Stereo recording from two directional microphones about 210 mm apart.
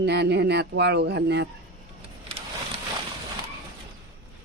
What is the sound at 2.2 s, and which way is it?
Printer, 25° right (ahead or behind).